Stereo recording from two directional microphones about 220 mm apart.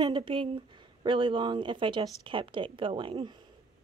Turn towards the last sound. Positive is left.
turn(degrees=-25)  # may be behind; listen again after turning